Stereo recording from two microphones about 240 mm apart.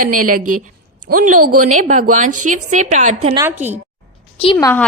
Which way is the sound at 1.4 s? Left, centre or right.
Right.